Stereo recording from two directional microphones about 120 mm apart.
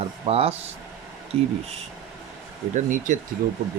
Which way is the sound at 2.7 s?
90° right.